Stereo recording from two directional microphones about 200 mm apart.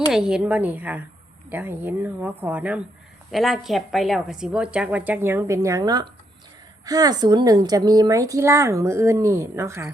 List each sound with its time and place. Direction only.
0.1 s a woman's voice: 5° right (ahead or behind)